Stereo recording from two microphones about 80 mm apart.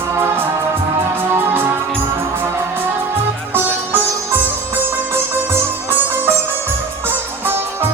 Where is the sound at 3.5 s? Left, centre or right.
Right.